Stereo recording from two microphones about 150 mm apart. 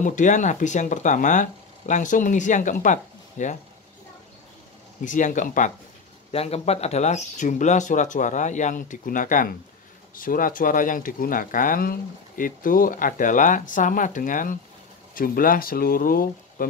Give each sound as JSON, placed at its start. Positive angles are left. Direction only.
{"t": 0.0, "sound": "speech", "side_deg": 55}
{"t": 5.0, "sound": "speech", "side_deg": 55}
{"t": 6.3, "sound": "speech", "side_deg": 45}